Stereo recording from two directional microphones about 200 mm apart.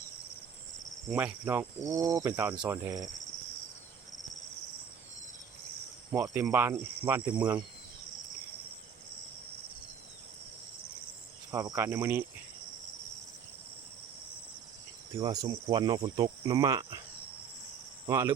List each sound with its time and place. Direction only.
1.1 s speech: 10° right (ahead or behind)
6.1 s speech: 10° right (ahead or behind)
11.5 s speech: 20° right (ahead or behind)
15.2 s cricket: 20° right (ahead or behind)
18.0 s cricket: 15° right (ahead or behind)